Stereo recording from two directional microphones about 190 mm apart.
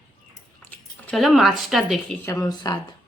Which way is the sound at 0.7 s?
5° left (ahead or behind).